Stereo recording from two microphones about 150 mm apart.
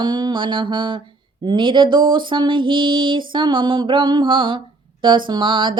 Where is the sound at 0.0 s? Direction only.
30° right (ahead or behind).